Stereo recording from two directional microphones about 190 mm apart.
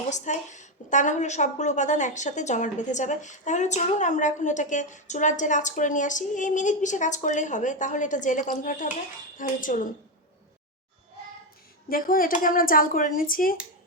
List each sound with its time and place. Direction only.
0.1 s a woman's voice: 40° left (ahead or behind)
11.9 s speech: 50° left (ahead or behind)